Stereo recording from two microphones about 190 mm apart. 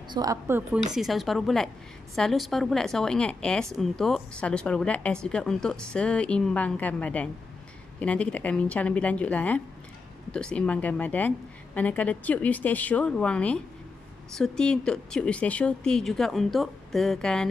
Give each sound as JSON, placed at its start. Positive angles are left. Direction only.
{"t": 0.1, "sound": "speech", "side_deg": -20}
{"t": 0.9, "sound": "a woman's voice", "side_deg": 0}